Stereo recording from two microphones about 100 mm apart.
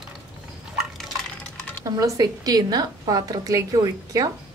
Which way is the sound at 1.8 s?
35° right (ahead or behind).